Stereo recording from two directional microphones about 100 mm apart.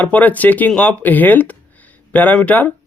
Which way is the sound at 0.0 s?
15° left (ahead or behind).